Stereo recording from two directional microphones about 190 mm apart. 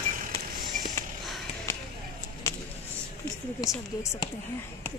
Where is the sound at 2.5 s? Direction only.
15° left (ahead or behind).